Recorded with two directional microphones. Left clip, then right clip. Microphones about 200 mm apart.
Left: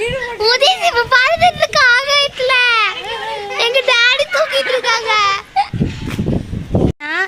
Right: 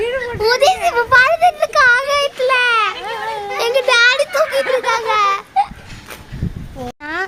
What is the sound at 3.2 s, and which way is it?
Children playing, 25° right (ahead or behind).